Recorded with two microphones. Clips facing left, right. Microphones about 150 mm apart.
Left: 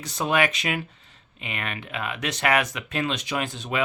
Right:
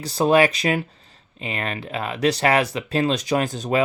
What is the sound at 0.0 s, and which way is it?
Speech, 35° right (ahead or behind).